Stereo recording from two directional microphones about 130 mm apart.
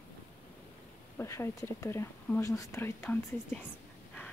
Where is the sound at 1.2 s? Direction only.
20° left (ahead or behind).